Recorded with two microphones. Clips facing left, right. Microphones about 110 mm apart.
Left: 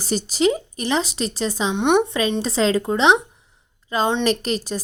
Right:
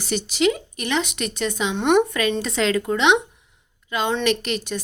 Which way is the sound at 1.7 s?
15° left (ahead or behind).